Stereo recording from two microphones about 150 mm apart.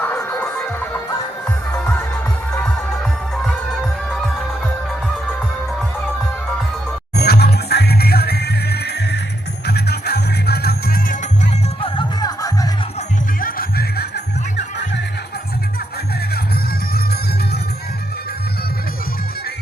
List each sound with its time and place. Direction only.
0.0 s music: 15° left (ahead or behind)
1.7 s music: 5° left (ahead or behind)
7.2 s music: 90° left
11.8 s music: 30° left (ahead or behind)
13.4 s music: 85° left